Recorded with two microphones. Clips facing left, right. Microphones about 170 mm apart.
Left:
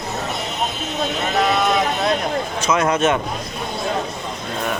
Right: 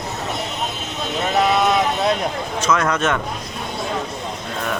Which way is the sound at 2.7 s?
20° left (ahead or behind).